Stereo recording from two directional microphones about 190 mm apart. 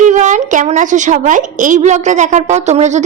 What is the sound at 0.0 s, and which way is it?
A woman's voice, 40° right (ahead or behind).